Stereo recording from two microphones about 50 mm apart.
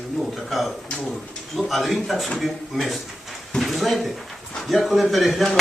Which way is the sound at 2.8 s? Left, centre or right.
Centre.